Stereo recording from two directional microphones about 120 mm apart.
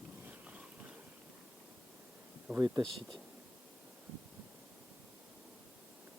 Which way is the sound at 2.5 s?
5° right (ahead or behind).